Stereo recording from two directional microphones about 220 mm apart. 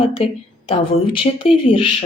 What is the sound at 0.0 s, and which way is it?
Speech, 25° left (ahead or behind).